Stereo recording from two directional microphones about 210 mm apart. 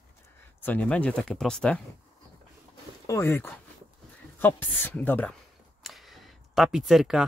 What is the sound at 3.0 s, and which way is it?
Speech, 10° left (ahead or behind).